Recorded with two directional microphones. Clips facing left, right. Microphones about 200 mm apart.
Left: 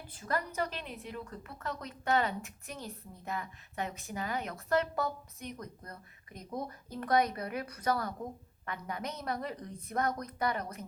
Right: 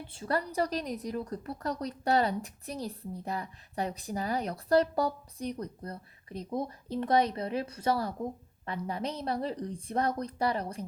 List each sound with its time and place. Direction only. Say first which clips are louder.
0.1 s a woman's voice: right 4 dB; 30° right (ahead or behind)